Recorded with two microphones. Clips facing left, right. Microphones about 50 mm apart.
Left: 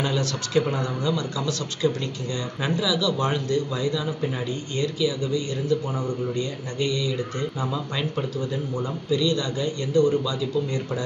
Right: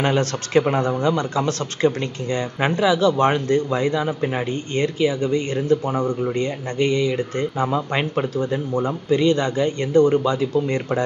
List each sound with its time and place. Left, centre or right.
0.0 s speech: right